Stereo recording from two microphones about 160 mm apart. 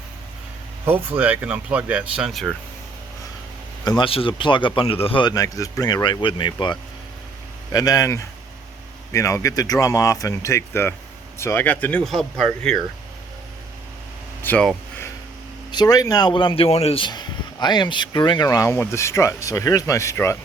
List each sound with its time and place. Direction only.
0.9 s speech: 10° right (ahead or behind)
3.8 s speech: 30° left (ahead or behind); by 12.8 s 5° left (ahead or behind)
14.4 s speech: 10° left (ahead or behind)
15.7 s speech: 25° left (ahead or behind)